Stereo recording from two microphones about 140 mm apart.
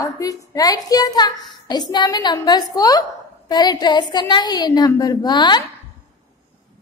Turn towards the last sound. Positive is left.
turn(degrees=30)  # may be behind; listen again after turning